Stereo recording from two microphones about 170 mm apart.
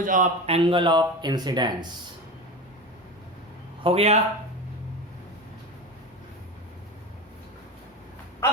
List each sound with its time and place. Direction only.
0.0 s a man's voice: 50° right (ahead or behind)
0.4 s speech: 35° right (ahead or behind)
3.8 s speech: 35° right (ahead or behind)